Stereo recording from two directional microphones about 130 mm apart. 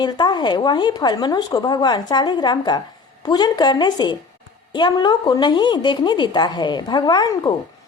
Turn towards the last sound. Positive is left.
turn(degrees=30)  # may be behind; listen again after turning